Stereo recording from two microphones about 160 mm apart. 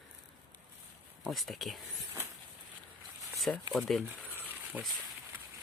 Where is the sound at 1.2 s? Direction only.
Centre (ahead or behind).